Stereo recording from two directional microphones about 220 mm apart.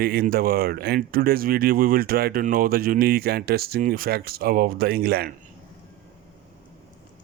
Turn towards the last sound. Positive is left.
turn(degrees=-45)  # may be behind; listen again after turning